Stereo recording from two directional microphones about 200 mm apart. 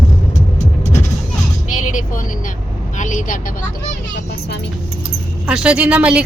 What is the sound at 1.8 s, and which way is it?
Vehicle, 40° left (ahead or behind).